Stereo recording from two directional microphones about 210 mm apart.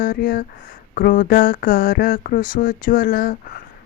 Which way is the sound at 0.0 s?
45° left (ahead or behind).